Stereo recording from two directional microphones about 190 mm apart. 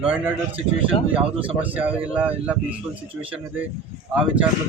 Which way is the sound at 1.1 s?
30° right (ahead or behind).